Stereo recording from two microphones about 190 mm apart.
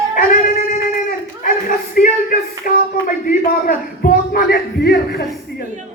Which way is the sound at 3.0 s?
45° left (ahead or behind).